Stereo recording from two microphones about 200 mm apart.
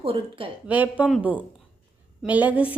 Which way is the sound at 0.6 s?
10° right (ahead or behind).